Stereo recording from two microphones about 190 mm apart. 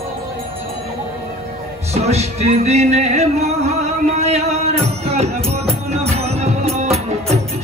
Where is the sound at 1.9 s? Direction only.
35° right (ahead or behind).